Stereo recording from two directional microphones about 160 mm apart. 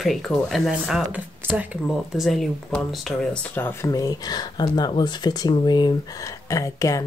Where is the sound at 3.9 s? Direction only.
25° left (ahead or behind).